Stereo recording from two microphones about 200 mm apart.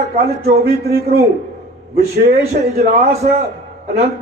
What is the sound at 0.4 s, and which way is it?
Speech, 50° right (ahead or behind).